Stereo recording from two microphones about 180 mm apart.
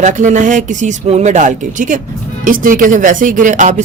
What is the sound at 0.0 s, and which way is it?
Speech, 45° right (ahead or behind).